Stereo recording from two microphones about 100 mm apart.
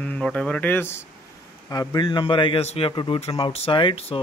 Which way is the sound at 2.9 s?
60° left (ahead or behind).